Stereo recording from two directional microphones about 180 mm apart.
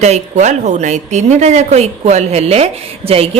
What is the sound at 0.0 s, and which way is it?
A woman's voice, 40° right (ahead or behind).